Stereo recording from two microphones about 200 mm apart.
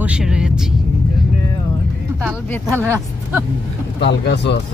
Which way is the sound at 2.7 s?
10° left (ahead or behind).